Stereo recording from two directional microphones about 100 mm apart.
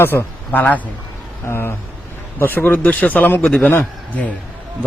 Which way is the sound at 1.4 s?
25° left (ahead or behind).